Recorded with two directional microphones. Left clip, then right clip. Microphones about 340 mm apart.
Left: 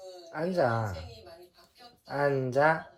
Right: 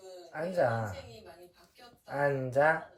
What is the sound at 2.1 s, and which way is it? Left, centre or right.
Speech, left.